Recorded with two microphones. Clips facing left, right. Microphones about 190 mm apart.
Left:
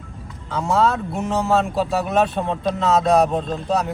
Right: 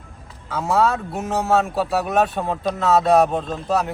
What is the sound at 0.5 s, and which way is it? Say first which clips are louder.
Speech: even; centre (ahead or behind).